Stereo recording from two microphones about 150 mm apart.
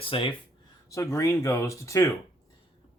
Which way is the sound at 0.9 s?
20° left (ahead or behind).